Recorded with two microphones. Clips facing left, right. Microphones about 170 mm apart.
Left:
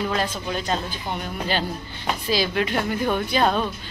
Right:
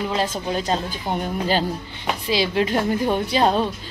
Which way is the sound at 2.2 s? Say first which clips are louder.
Right 3 dB; 25° right (ahead or behind).